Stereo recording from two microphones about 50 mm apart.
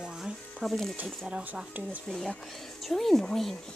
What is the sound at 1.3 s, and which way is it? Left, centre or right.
Speech, centre.